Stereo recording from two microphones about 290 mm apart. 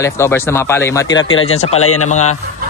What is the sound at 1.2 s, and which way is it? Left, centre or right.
Speech, left.